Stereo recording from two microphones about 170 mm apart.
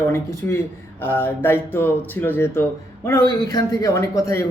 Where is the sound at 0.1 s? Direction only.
15° left (ahead or behind).